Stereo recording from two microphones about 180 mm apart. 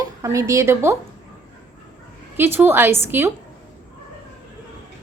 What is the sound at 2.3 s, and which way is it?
Speech, 10° right (ahead or behind).